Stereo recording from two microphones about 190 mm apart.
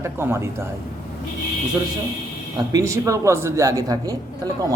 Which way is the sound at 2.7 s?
15° right (ahead or behind).